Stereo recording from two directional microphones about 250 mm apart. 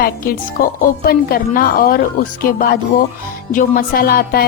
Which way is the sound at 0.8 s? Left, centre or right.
Left.